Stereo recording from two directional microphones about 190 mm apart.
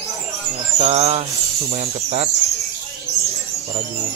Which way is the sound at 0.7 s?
35° right (ahead or behind).